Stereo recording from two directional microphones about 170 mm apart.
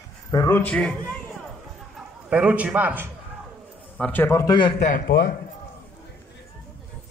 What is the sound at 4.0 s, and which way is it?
Speech, 10° left (ahead or behind).